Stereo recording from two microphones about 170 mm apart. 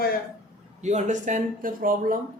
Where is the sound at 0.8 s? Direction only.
45° right (ahead or behind).